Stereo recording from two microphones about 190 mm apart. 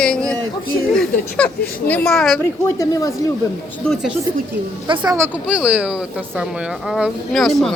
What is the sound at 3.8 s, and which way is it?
Speech, centre (ahead or behind).